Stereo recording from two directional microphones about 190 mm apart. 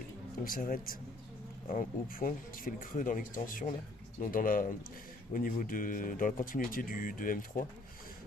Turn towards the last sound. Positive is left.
turn(degrees=45)  # may be behind; listen again after turning